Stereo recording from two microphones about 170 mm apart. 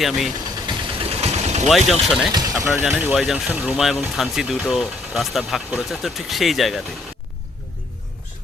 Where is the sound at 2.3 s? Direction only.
20° right (ahead or behind).